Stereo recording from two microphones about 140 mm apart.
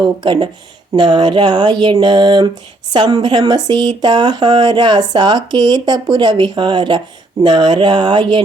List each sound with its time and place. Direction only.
0.0 s speech: 35° right (ahead or behind)